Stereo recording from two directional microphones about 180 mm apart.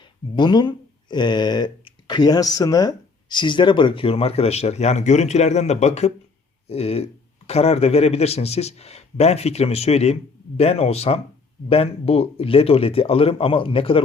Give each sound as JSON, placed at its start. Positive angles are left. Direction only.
{"t": 0.0, "sound": "speech", "side_deg": 25}